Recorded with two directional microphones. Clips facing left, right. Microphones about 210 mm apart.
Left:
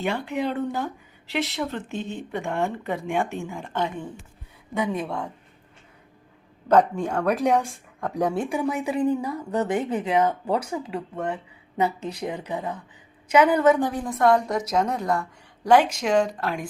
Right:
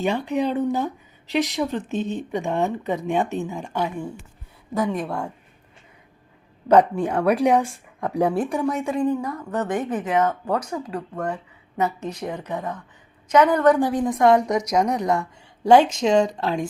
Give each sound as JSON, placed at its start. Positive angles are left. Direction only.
{"t": 0.0, "sound": "a woman's voice", "side_deg": -15}
{"t": 6.7, "sound": "a woman's voice", "side_deg": -10}
{"t": 13.7, "sound": "a woman's voice", "side_deg": -15}